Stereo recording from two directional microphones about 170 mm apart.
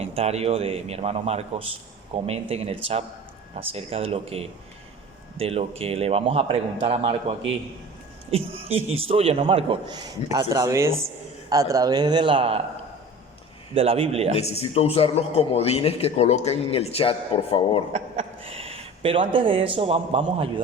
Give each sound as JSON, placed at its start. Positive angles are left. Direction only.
{"t": 0.0, "sound": "a man's voice", "side_deg": -35}
{"t": 13.7, "sound": "a man's voice", "side_deg": -35}
{"t": 14.3, "sound": "a man's voice", "side_deg": 35}
{"t": 17.9, "sound": "speech", "side_deg": -35}